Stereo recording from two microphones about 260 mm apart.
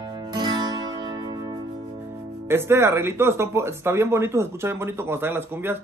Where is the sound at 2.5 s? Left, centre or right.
Centre.